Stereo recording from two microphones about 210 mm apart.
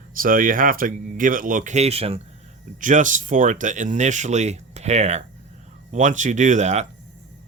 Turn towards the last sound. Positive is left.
turn(degrees=-35)  # may be behind; listen again after turning